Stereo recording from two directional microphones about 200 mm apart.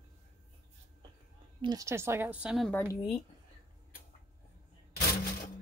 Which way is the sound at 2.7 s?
10° left (ahead or behind).